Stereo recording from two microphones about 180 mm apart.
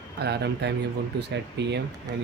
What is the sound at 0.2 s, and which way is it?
Speech, 70° right (ahead or behind).